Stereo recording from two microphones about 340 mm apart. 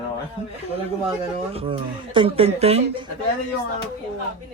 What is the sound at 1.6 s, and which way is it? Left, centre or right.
Speech, centre.